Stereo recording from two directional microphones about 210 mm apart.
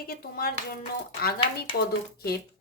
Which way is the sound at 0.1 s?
45° left (ahead or behind).